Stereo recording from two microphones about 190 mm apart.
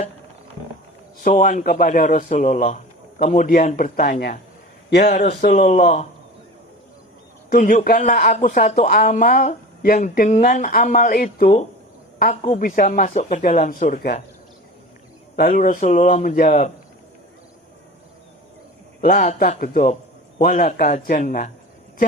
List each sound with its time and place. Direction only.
1.2 s a man's voice: 40° left (ahead or behind)
5.6 s a man's voice: 35° left (ahead or behind)
7.5 s a man's voice: 40° left (ahead or behind)
15.4 s a man's voice: 45° left (ahead or behind)
19.0 s a man's voice: 45° left (ahead or behind)